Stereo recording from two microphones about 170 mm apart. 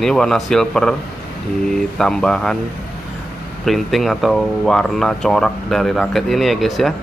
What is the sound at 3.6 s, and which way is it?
Speech, centre (ahead or behind).